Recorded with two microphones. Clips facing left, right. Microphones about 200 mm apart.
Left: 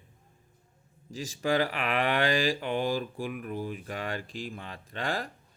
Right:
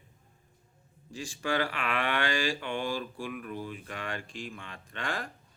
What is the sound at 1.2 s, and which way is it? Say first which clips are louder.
Speech: left 4 dB; 40° left (ahead or behind).